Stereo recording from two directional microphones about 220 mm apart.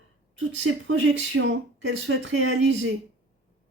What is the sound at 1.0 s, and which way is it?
Speech, 55° right (ahead or behind).